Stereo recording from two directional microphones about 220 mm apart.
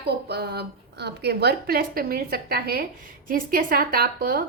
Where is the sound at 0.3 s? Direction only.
50° right (ahead or behind).